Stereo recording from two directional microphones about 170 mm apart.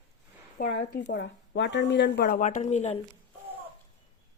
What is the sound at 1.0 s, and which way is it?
Speech, 90° left.